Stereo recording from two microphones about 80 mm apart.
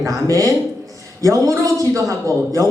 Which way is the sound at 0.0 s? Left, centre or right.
Right.